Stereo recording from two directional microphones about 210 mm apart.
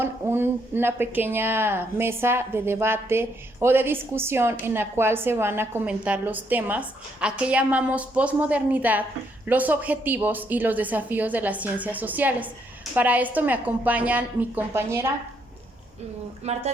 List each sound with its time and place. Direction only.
0.0 s a woman's voice: 10° right (ahead or behind)
16.4 s speech: 30° right (ahead or behind)